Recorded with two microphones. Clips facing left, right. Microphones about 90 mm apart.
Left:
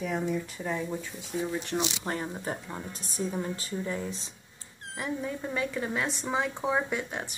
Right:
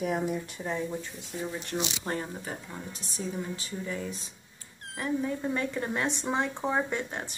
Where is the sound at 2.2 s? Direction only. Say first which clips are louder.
Left 3 dB; 25° left (ahead or behind).